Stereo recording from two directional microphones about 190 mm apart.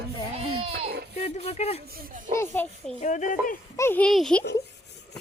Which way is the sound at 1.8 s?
50° right (ahead or behind).